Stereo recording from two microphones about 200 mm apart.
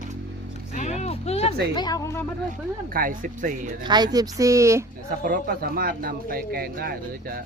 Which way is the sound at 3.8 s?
20° right (ahead or behind).